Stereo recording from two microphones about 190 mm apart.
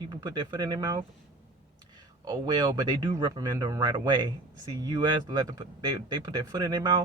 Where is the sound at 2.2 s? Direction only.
20° right (ahead or behind).